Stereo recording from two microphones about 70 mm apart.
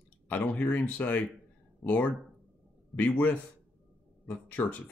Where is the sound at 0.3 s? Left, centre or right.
Left.